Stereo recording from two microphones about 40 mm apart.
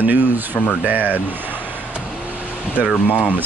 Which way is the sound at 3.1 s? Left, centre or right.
Left.